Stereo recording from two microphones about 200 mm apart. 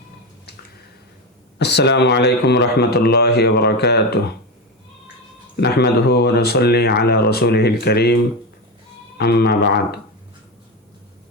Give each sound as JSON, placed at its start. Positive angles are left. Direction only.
{"t": 1.5, "sound": "speech", "side_deg": 60}
{"t": 5.5, "sound": "speech", "side_deg": 55}